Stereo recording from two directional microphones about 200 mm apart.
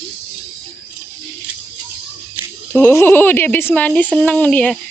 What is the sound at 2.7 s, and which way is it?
Speech, 10° left (ahead or behind).